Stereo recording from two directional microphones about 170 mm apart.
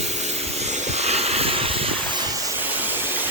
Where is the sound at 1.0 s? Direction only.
40° right (ahead or behind).